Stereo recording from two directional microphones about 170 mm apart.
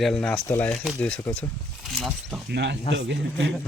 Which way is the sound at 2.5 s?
90° right.